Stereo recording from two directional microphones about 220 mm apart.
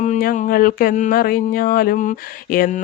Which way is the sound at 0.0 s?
35° left (ahead or behind).